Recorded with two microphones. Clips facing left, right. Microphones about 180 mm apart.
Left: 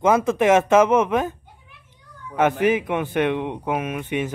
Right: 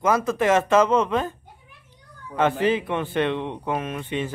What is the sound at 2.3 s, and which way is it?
Speech, 15° left (ahead or behind).